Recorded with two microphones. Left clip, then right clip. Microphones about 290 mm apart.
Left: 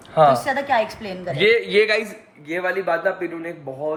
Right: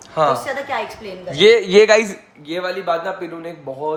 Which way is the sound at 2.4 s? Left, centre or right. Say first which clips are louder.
Right 1 dB; centre.